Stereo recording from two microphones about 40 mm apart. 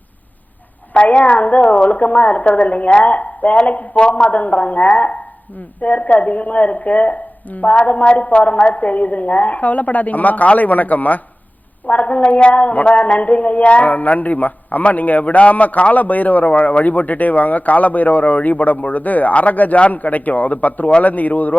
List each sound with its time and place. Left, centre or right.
0.9 s speech: left
11.9 s speech: left
16.6 s speech: left
16.8 s a man's voice: left